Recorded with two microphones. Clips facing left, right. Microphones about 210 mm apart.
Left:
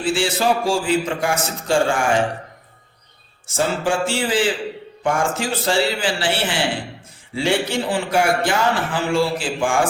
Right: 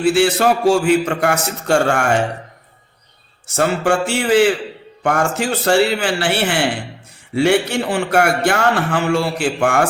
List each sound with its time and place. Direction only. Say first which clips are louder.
0.0 s a man's voice: right 6 dB; 65° right (ahead or behind)
3.4 s a man's voice: right 4 dB; 65° right (ahead or behind)